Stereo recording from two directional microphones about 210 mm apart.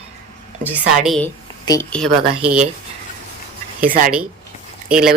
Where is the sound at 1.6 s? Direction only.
15° left (ahead or behind).